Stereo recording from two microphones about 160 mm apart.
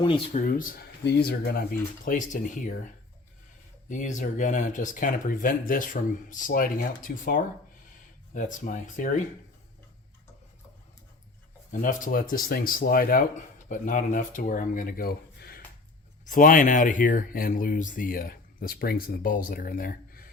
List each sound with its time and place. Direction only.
0.3 s speech: 60° left (ahead or behind)
3.8 s speech: 50° left (ahead or behind)
11.7 s speech: 55° left (ahead or behind); by 15.6 s 75° left (ahead or behind)
16.2 s speech: 55° left (ahead or behind)